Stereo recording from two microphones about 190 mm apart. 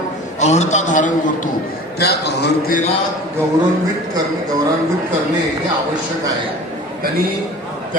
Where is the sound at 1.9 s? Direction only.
60° left (ahead or behind).